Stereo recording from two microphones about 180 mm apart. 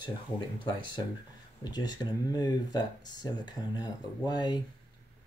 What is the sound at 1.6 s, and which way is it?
Speech, 25° left (ahead or behind).